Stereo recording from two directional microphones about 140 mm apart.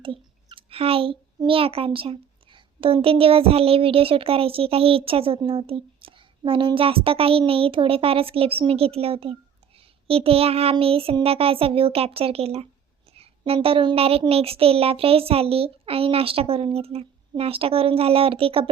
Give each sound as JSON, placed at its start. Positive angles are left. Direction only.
{"t": 0.0, "sound": "clicking", "side_deg": -40}
{"t": 1.5, "sound": "a child's voice", "side_deg": -40}